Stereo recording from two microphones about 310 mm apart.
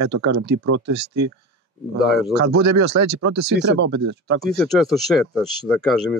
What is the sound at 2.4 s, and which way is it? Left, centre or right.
Speech, right.